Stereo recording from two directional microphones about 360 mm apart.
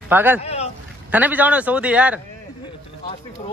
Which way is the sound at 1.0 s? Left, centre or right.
Centre.